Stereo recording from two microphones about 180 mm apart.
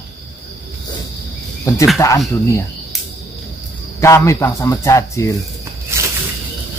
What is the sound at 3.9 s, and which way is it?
Speech, 15° left (ahead or behind).